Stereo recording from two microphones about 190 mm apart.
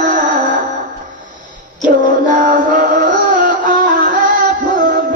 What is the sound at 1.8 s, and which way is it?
Music, 45° right (ahead or behind).